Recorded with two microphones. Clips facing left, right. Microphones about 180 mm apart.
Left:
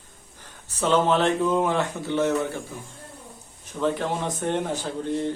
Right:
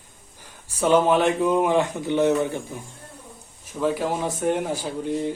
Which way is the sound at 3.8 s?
5° right (ahead or behind).